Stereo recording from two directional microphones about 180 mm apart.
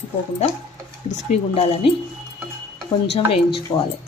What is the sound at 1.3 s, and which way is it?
Speech, 30° left (ahead or behind).